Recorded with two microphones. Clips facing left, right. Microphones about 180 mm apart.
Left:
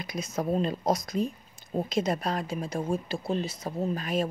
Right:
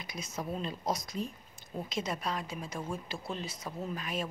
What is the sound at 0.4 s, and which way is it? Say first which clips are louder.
Speech: left 10 dB; 40° left (ahead or behind).